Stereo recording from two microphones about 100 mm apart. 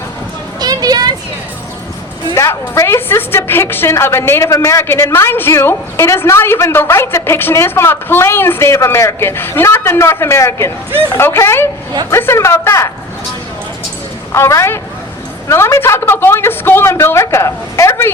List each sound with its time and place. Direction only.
0.6 s a sound: 40° right (ahead or behind)
2.3 s a woman's voice: 30° left (ahead or behind)
14.3 s a woman's voice: 30° left (ahead or behind)